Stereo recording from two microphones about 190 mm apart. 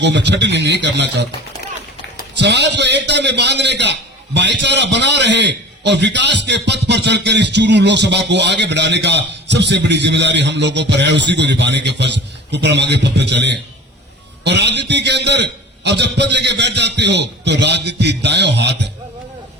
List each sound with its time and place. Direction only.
0.0 s a man's voice: 65° right (ahead or behind)
2.4 s a man's voice: 65° right (ahead or behind)